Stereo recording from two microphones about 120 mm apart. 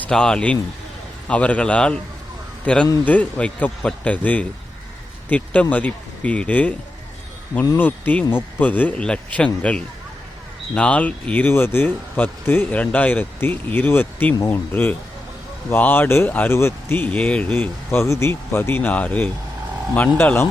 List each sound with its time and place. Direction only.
0.0 s speech: 5° left (ahead or behind)
7.8 s speech: 15° left (ahead or behind)